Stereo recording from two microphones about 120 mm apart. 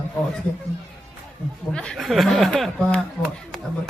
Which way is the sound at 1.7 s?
5° left (ahead or behind).